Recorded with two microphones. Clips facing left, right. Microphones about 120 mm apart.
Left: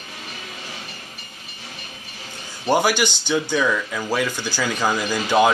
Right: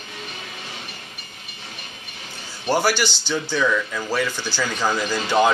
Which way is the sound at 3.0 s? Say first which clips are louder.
Left 2 dB; 50° left (ahead or behind).